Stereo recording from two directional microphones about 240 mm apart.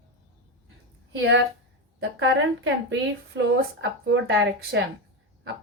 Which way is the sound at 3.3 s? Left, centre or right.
Right.